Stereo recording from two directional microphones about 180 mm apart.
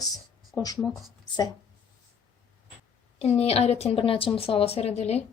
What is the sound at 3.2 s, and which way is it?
A woman's voice, 35° left (ahead or behind).